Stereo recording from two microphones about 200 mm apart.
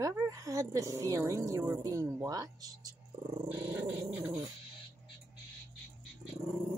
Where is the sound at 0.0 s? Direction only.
15° right (ahead or behind).